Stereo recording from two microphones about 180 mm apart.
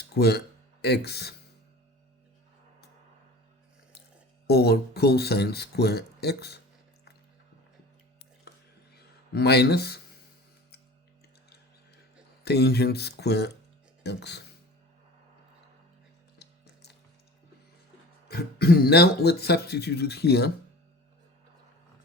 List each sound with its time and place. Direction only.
0.0 s speech: 65° left (ahead or behind)
4.4 s speech: 60° left (ahead or behind)
9.0 s speech: 65° left (ahead or behind)
12.5 s speech: 60° left (ahead or behind)
16.4 s music: 70° left (ahead or behind)
18.3 s speech: 60° left (ahead or behind)